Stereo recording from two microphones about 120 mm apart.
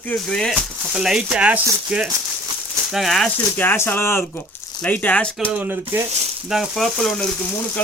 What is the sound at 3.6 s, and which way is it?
Speech, 20° left (ahead or behind).